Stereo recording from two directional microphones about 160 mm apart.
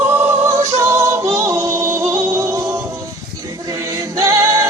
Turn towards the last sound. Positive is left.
turn(degrees=-15)  # may be behind; listen again after turning